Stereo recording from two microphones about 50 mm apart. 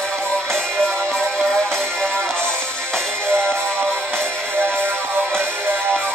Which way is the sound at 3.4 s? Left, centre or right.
Right.